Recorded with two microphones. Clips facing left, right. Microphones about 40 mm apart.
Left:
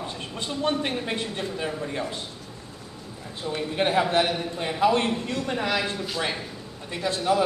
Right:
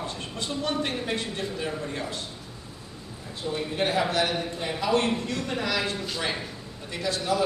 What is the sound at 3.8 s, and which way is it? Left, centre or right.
Speech, left.